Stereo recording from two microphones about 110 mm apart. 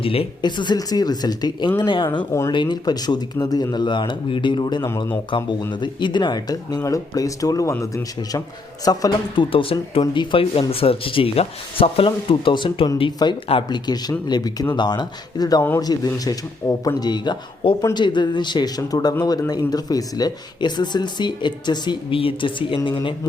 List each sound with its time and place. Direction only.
0.0 s speech: 55° left (ahead or behind)
0.4 s speech: 40° left (ahead or behind)
9.3 s speech: 50° left (ahead or behind)
10.5 s speech: 60° left (ahead or behind)